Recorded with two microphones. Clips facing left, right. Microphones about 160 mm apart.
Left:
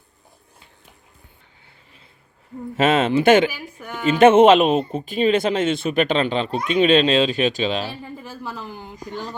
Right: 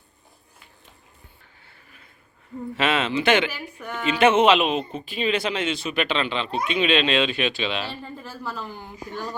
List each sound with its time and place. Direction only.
2.7 s speech: 45° left (ahead or behind)
3.8 s a woman's voice: 5° left (ahead or behind)
4.0 s speech: 50° left (ahead or behind)
7.9 s a woman's voice: 15° left (ahead or behind)